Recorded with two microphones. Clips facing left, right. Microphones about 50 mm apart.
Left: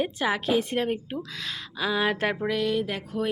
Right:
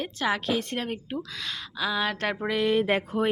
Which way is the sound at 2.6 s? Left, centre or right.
Right.